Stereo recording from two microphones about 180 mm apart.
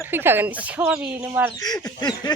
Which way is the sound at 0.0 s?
10° right (ahead or behind).